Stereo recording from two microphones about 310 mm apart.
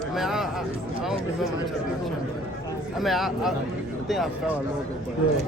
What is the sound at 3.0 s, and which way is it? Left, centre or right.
A man's voice, centre.